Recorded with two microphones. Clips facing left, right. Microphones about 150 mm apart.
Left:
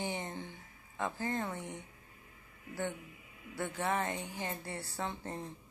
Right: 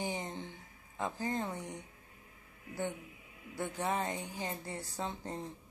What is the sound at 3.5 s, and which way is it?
A woman's voice, 15° right (ahead or behind).